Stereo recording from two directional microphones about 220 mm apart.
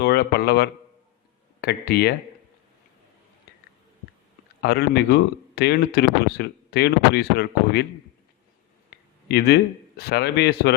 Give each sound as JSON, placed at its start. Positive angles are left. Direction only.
{"t": 0.0, "sound": "a sound", "side_deg": 45}
{"t": 1.6, "sound": "speech", "side_deg": 45}
{"t": 4.6, "sound": "speech", "side_deg": 45}
{"t": 9.3, "sound": "speech", "side_deg": 45}